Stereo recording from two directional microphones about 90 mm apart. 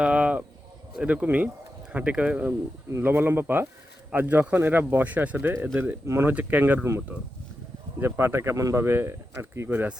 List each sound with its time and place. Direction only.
0.0 s a sound: 15° right (ahead or behind)
1.0 s speech: 15° right (ahead or behind)
7.9 s speech: 25° right (ahead or behind)